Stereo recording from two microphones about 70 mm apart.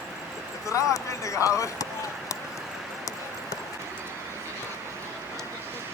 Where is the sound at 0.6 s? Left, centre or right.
Left.